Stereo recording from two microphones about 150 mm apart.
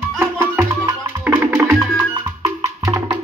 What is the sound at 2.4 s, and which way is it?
Music, 20° right (ahead or behind).